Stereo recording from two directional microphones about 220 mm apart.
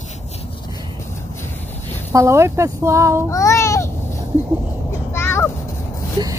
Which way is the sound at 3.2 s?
15° left (ahead or behind).